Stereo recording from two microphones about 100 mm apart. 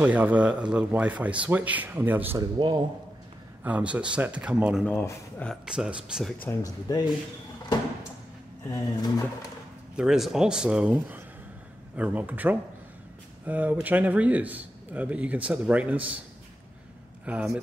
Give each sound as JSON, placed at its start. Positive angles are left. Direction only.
{"t": 0.0, "sound": "a man's voice", "side_deg": -15}
{"t": 2.6, "sound": "a man's voice", "side_deg": -55}
{"t": 3.6, "sound": "a man's voice", "side_deg": -15}
{"t": 6.5, "sound": "speech", "side_deg": 25}
{"t": 6.9, "sound": "speech", "side_deg": 40}
{"t": 8.6, "sound": "speech", "side_deg": 35}
{"t": 9.9, "sound": "a man's voice", "side_deg": -5}
{"t": 17.2, "sound": "speech", "side_deg": -15}